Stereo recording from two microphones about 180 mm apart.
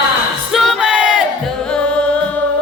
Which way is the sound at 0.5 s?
Centre (ahead or behind).